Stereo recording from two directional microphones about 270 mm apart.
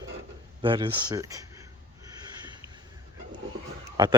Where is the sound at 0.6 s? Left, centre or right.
Centre.